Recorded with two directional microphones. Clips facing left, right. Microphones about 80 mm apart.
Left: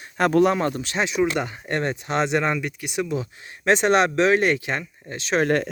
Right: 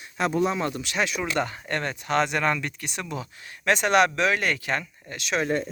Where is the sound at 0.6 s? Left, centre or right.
Left.